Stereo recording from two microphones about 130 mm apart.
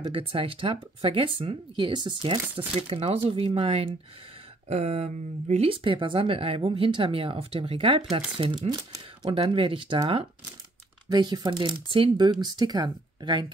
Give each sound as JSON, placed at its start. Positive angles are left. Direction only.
{"t": 0.0, "sound": "speech", "side_deg": -45}
{"t": 4.6, "sound": "speech", "side_deg": -55}
{"t": 8.6, "sound": "speech", "side_deg": -30}
{"t": 9.3, "sound": "speech", "side_deg": -45}